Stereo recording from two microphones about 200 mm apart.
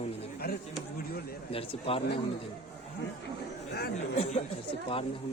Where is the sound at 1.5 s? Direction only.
30° left (ahead or behind).